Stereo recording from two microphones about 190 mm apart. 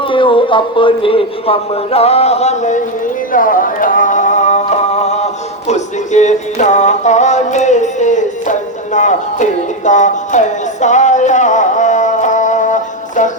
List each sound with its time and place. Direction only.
0.1 s speech: 25° left (ahead or behind)
3.3 s music: 45° left (ahead or behind)